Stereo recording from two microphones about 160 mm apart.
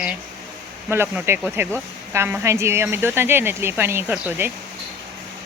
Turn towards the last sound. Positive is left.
turn(degrees=-15)  # may be behind; listen again after turning